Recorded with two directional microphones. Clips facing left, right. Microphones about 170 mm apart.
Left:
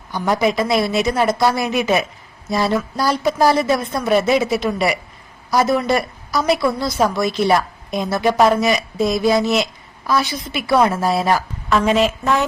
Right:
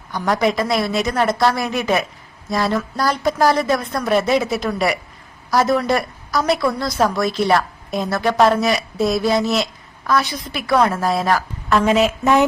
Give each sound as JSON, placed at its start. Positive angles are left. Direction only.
{"t": 0.1, "sound": "a woman's voice", "side_deg": 5}
{"t": 8.1, "sound": "speech", "side_deg": 20}
{"t": 8.4, "sound": "speech", "side_deg": 0}
{"t": 12.2, "sound": "speech", "side_deg": -15}